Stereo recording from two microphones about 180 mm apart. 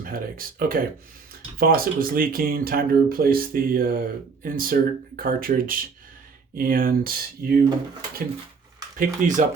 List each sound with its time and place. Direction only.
0.0 s speech: 50° right (ahead or behind)
9.0 s speech: 45° right (ahead or behind)